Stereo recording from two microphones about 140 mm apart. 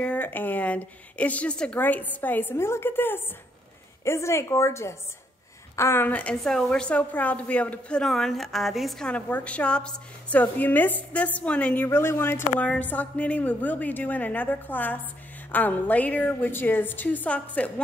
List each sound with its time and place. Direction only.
0.0 s a woman's voice: 10° left (ahead or behind)